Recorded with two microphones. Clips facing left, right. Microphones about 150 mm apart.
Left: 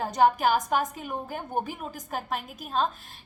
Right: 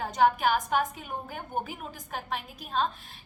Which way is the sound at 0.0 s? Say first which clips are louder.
Left 2 dB; 40° left (ahead or behind).